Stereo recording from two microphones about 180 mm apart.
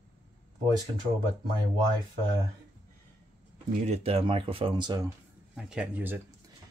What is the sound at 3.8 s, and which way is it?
Speech, 35° right (ahead or behind).